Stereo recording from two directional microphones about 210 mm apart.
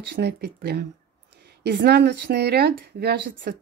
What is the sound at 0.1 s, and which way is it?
Speech, 50° right (ahead or behind).